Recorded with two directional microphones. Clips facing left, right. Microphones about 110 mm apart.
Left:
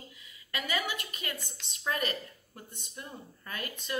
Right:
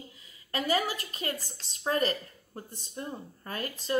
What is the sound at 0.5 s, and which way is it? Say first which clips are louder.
A woman's voice: right 5 dB; 35° right (ahead or behind).